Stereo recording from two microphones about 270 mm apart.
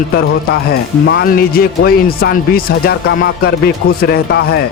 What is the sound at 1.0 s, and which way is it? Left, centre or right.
Speech, left.